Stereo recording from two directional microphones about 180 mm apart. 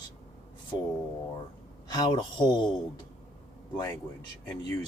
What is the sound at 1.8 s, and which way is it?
Speech, 25° left (ahead or behind).